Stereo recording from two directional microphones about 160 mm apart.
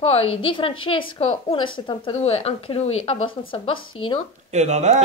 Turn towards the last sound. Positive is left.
turn(degrees=-45)  # may be behind; listen again after turning